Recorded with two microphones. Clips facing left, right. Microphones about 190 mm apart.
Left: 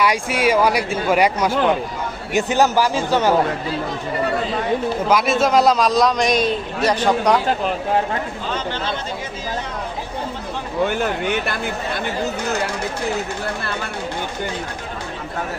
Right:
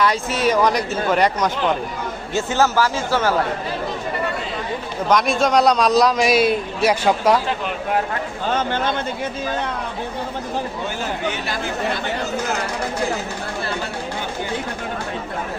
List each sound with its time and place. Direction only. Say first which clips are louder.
0.0 s speech: left 1 dB; 10° left (ahead or behind)
5.0 s a man's voice: right 1 dB; 5° left (ahead or behind)
8.4 s a man's voice: right 7 dB; 55° right (ahead or behind)
10.8 s speech: left 4 dB; 60° left (ahead or behind)